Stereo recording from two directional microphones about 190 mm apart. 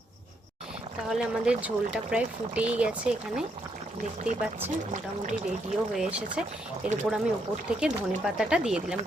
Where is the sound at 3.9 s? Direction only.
40° right (ahead or behind).